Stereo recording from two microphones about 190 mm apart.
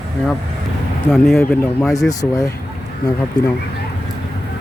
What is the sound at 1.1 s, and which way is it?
Speech, centre (ahead or behind).